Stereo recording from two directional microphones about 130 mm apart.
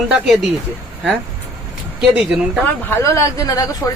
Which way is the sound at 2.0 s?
5° right (ahead or behind).